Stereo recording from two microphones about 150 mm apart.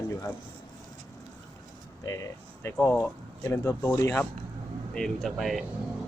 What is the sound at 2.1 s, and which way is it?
Speech, 20° left (ahead or behind).